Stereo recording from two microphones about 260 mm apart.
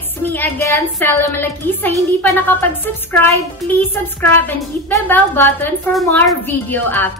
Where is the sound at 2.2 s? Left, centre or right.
Centre.